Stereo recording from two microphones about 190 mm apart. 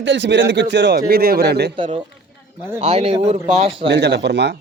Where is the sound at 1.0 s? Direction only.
55° right (ahead or behind).